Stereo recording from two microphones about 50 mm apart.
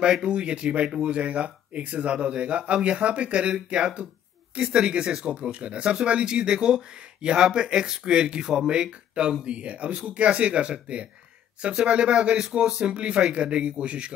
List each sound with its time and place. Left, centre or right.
0.0 s speech: centre